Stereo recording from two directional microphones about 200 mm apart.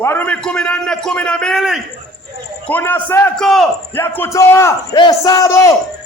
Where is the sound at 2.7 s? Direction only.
10° left (ahead or behind).